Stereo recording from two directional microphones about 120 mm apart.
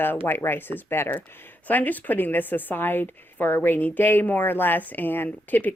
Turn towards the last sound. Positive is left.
turn(degrees=15)  # may be behind; listen again after turning